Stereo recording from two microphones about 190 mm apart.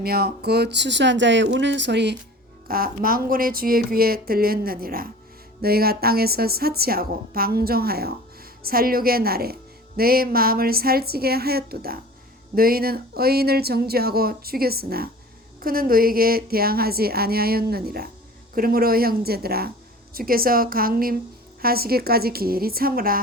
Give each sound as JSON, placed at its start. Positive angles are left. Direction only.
{"t": 0.0, "sound": "speech", "side_deg": -55}
{"t": 2.6, "sound": "a woman's voice", "side_deg": -50}